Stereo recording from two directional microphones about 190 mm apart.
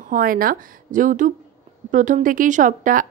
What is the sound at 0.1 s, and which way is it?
Speech, 45° right (ahead or behind).